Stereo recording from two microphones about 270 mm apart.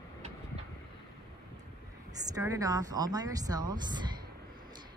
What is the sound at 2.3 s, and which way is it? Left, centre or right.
Speech, centre.